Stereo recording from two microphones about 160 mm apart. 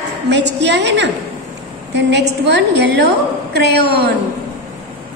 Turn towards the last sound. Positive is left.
turn(degrees=-85)